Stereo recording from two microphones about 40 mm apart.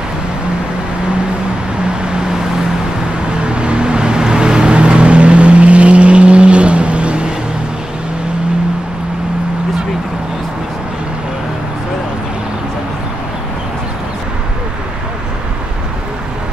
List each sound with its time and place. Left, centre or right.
3.4 s vehicle: right